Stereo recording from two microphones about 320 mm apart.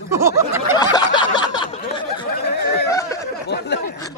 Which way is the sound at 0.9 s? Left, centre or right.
Centre.